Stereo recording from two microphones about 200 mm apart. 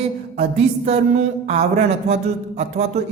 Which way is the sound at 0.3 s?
30° right (ahead or behind).